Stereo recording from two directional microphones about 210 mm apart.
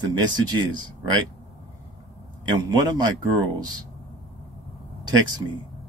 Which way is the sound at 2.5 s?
20° right (ahead or behind).